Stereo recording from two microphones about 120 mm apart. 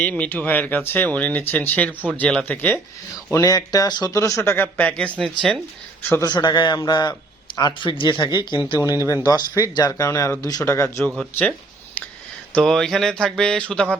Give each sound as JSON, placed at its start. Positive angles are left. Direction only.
{"t": 0.0, "sound": "speech", "side_deg": 15}
{"t": 3.3, "sound": "speech", "side_deg": 30}
{"t": 6.0, "sound": "speech", "side_deg": 20}
{"t": 6.2, "sound": "a man's voice", "side_deg": 40}
{"t": 8.8, "sound": "speech", "side_deg": 30}
{"t": 12.5, "sound": "speech", "side_deg": 5}